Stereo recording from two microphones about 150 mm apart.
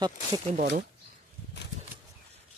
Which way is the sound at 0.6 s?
65° right (ahead or behind).